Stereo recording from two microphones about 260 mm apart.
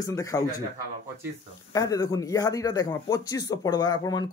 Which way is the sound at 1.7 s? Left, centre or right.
Centre.